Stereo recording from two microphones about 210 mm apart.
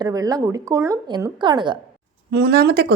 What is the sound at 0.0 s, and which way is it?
A woman's voice, 15° right (ahead or behind).